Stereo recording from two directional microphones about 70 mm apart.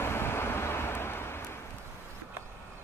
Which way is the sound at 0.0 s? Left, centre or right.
Left.